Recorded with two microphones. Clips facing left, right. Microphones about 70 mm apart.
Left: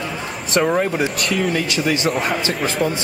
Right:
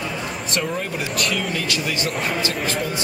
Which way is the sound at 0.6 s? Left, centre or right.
Left.